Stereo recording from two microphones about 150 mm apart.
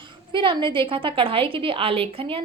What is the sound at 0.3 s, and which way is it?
A woman's voice, 35° right (ahead or behind).